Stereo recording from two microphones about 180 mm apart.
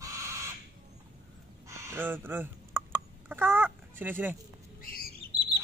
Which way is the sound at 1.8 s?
15° right (ahead or behind).